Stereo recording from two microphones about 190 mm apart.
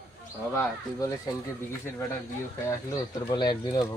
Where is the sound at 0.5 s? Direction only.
15° left (ahead or behind).